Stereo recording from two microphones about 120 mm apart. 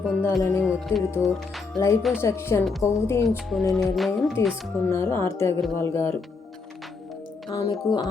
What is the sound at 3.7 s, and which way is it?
Speech, centre (ahead or behind).